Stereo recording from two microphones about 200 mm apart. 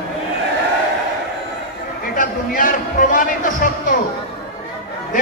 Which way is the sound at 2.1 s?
45° left (ahead or behind).